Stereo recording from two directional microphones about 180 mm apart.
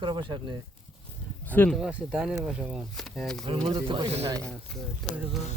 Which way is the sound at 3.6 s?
25° right (ahead or behind).